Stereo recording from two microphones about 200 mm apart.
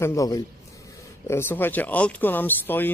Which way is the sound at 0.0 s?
15° left (ahead or behind).